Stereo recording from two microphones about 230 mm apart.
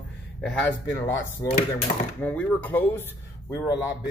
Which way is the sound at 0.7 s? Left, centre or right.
Left.